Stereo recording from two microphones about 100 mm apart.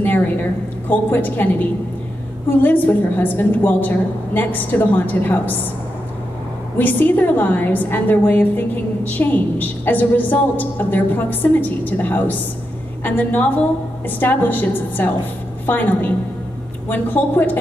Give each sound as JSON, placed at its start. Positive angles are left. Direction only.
{"t": 0.0, "sound": "a woman's voice", "side_deg": 20}
{"t": 6.8, "sound": "a woman's voice", "side_deg": 20}